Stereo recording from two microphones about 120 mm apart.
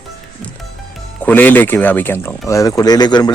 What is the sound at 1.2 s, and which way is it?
A man's voice, 15° left (ahead or behind).